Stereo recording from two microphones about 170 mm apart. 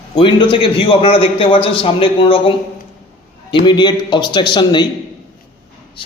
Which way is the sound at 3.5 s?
25° left (ahead or behind).